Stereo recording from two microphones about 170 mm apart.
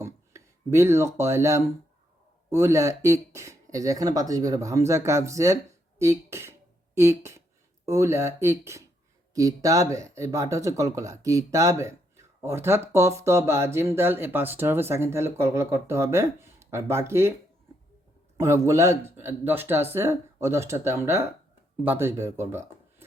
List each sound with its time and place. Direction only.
0.0 s a sound: 15° right (ahead or behind)
2.5 s speech: 15° right (ahead or behind)
18.3 s speech: 15° right (ahead or behind)